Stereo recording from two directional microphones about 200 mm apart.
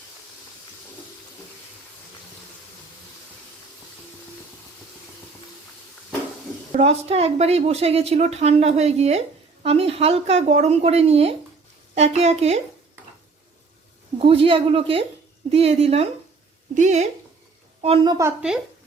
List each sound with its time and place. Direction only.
6.7 s a woman's voice: 30° right (ahead or behind)
14.2 s a woman's voice: 30° right (ahead or behind)
17.8 s a woman's voice: 25° right (ahead or behind)